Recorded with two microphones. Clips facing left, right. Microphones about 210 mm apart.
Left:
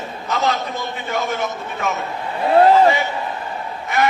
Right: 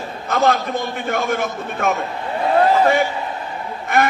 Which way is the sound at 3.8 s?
55° right (ahead or behind).